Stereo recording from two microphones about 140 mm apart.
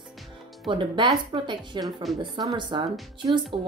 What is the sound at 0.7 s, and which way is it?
A woman's voice, 35° right (ahead or behind).